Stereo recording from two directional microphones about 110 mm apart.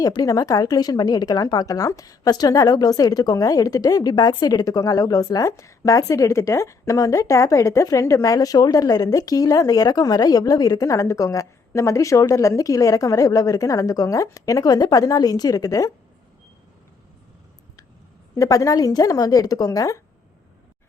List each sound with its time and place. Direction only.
0.0 s a woman's voice: 35° left (ahead or behind)
18.3 s a woman's voice: 30° left (ahead or behind)